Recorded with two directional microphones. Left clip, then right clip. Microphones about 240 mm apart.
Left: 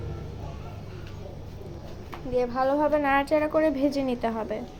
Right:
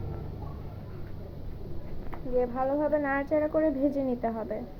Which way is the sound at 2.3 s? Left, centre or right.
Left.